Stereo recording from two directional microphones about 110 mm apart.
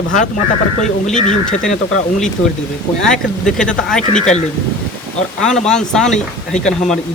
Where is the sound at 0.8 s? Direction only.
90° left.